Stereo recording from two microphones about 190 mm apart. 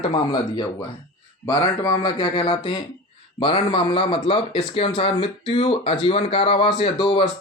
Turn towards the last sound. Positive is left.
turn(degrees=30)  # may be behind; listen again after turning